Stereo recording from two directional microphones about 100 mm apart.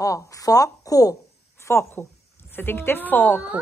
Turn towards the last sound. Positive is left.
turn(degrees=15)  # may be behind; listen again after turning